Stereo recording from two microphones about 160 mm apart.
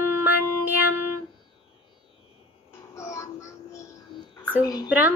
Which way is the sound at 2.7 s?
15° left (ahead or behind).